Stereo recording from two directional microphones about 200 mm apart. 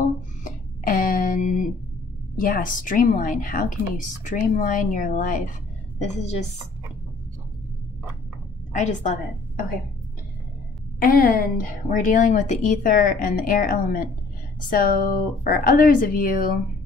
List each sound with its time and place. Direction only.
0.0 s a sound: 40° left (ahead or behind)
2.4 s a woman's voice: 45° left (ahead or behind)
8.7 s a woman's voice: 35° left (ahead or behind)
11.0 s a woman's voice: 45° left (ahead or behind)